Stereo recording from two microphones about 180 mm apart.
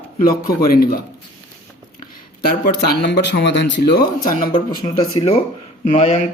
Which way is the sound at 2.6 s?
60° left (ahead or behind).